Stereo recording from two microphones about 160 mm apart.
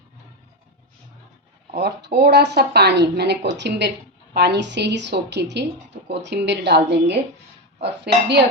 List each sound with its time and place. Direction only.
1.7 s a woman's voice: 90° right